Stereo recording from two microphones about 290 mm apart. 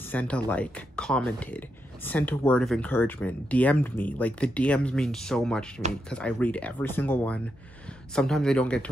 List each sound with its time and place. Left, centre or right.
0.1 s speech: centre